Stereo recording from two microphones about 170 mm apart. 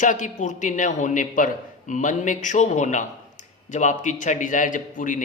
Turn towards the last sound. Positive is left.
turn(degrees=50)  # may be behind; listen again after turning